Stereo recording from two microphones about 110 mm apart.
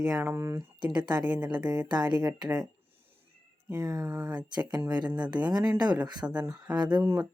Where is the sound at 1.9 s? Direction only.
40° right (ahead or behind).